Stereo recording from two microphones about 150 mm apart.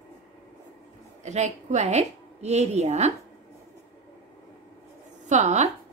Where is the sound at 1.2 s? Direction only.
50° right (ahead or behind).